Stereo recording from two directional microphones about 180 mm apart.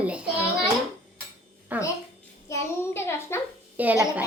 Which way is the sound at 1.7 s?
10° right (ahead or behind).